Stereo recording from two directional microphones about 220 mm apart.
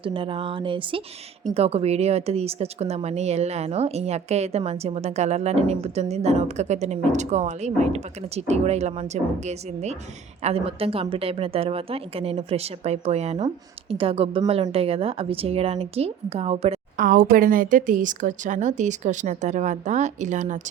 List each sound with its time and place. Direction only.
0.0 s a woman's voice: 25° right (ahead or behind)
17.1 s a woman's voice: 40° right (ahead or behind)